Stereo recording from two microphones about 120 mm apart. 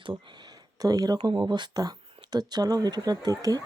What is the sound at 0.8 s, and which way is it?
Speech, 30° right (ahead or behind).